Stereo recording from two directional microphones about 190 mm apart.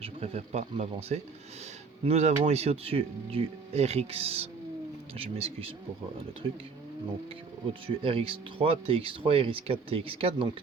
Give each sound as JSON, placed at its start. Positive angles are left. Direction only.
{"t": 0.0, "sound": "speech", "side_deg": -35}
{"t": 7.7, "sound": "speech", "side_deg": -30}